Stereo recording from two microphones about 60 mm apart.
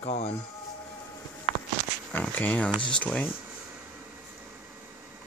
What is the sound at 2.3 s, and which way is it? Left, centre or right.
Speech, left.